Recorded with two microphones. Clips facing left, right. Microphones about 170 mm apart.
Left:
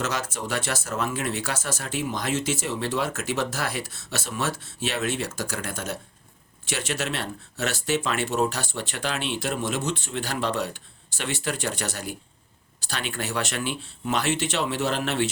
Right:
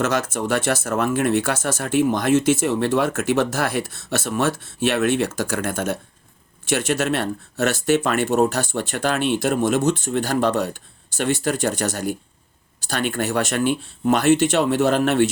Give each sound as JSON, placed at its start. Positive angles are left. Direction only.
{"t": 0.0, "sound": "speech", "side_deg": -50}